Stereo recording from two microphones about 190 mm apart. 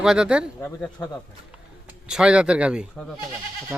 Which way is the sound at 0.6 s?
10° left (ahead or behind).